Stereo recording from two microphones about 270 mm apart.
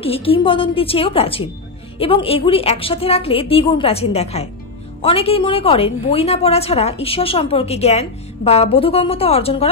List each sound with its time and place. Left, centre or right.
0.0 s a woman's voice: left